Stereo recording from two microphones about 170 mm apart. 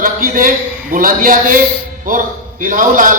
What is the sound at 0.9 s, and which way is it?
A woman's voice, 55° right (ahead or behind).